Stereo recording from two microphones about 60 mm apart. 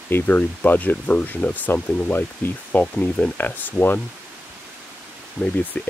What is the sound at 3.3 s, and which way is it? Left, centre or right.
Speech, left.